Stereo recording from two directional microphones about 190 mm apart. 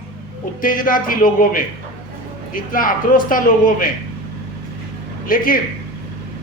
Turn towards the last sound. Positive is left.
turn(degrees=50)  # may be behind; listen again after turning